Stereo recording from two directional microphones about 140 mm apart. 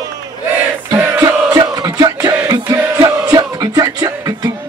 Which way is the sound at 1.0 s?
15° right (ahead or behind).